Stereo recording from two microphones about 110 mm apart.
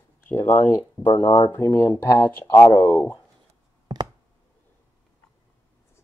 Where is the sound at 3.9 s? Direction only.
40° right (ahead or behind).